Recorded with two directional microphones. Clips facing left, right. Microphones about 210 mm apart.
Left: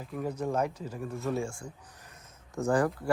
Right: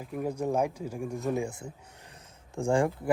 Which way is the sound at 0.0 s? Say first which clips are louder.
Right 2 dB; 10° right (ahead or behind).